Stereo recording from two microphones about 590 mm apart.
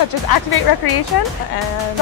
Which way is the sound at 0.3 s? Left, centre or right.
Left.